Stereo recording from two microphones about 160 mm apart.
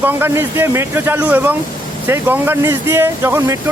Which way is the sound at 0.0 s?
15° right (ahead or behind).